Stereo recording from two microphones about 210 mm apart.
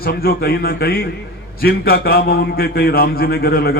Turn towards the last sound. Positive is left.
turn(degrees=45)  # may be behind; listen again after turning